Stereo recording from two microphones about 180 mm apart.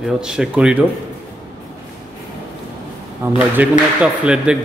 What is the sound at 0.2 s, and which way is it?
Speech, 5° right (ahead or behind).